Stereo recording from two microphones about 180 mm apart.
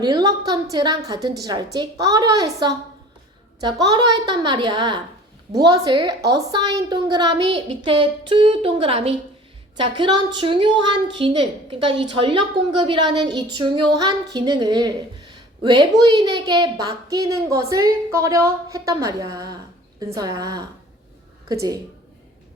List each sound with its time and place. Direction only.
0.0 s a woman's voice: 20° right (ahead or behind)